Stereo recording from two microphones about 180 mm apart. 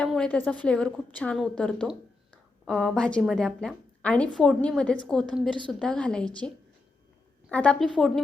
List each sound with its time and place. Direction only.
0.0 s a woman's voice: 5° left (ahead or behind)
5.5 s a woman's voice: 25° right (ahead or behind)
5.8 s a woman's voice: 5° left (ahead or behind)
7.5 s a woman's voice: 5° left (ahead or behind)